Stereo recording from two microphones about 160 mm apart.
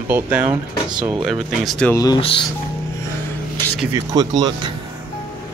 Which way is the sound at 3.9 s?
25° right (ahead or behind).